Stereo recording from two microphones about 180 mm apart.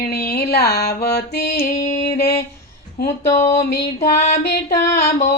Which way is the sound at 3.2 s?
15° left (ahead or behind).